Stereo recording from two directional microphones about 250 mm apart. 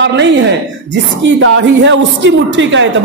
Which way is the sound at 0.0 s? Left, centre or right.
Right.